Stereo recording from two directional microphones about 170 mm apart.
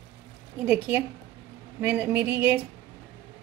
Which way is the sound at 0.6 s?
10° right (ahead or behind).